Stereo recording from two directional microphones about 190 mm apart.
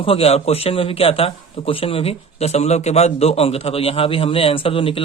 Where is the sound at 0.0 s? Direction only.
30° left (ahead or behind).